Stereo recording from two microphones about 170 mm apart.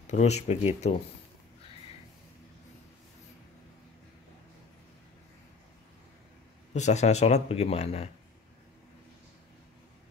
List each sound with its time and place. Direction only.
0.0 s speech: 40° left (ahead or behind)
6.7 s speech: 40° left (ahead or behind)